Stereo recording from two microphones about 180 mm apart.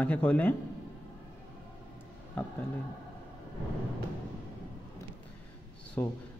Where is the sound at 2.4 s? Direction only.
10° left (ahead or behind).